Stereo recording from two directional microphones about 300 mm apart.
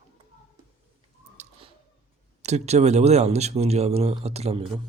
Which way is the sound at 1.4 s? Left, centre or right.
Centre.